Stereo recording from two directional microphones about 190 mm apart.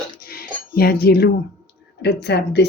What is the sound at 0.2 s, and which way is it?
Cutlery, 50° left (ahead or behind).